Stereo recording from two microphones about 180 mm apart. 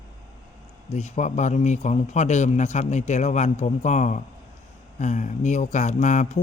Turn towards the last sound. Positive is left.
turn(degrees=40)  # may be behind; listen again after turning